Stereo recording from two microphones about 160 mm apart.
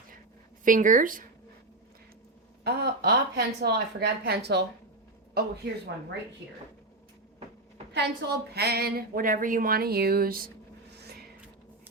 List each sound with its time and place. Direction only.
0.6 s speech: 55° right (ahead or behind)
2.6 s speech: 90° right
5.3 s a man's voice: 80° right
7.9 s a woman's voice: 90° right; by 10.5 s 65° right (ahead or behind)